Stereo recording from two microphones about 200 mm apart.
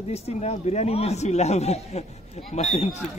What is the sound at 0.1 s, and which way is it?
Speech, 35° left (ahead or behind).